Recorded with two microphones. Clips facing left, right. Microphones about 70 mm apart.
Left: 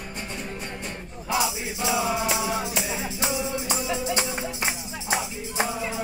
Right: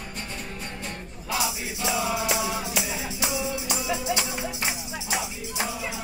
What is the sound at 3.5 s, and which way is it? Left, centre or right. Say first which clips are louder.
Music: left 2 dB; left.